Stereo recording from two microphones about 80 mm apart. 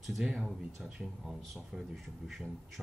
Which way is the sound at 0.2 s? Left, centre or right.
Centre.